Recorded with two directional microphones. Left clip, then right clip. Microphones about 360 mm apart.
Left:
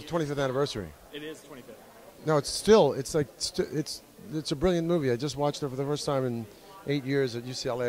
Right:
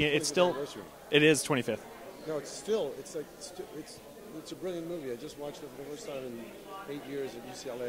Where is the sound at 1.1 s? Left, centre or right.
Right.